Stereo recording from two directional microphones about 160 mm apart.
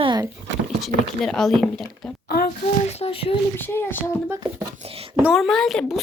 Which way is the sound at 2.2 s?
75° left (ahead or behind).